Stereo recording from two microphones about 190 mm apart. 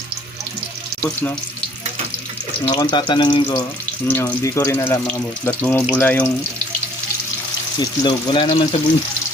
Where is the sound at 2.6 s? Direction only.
25° left (ahead or behind).